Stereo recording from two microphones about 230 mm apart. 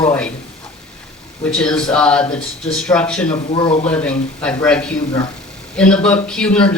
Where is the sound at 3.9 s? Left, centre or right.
Centre.